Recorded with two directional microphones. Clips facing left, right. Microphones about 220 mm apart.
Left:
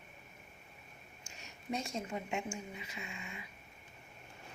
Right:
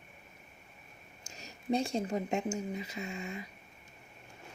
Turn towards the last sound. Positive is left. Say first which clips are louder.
# right 8 dB
turn(degrees=-40)  # may be behind; listen again after turning